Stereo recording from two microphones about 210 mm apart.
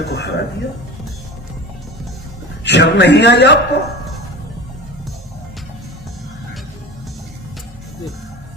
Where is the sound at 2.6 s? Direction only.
55° left (ahead or behind).